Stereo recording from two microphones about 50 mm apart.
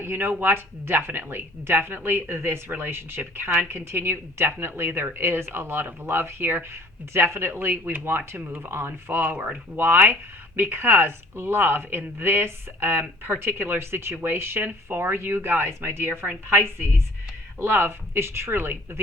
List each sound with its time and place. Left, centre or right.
0.0 s speech: right
9.3 s speech: right
9.7 s speech: right
17.6 s speech: right